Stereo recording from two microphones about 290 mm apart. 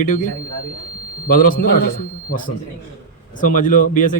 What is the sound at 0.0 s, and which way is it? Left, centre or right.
Speech, left.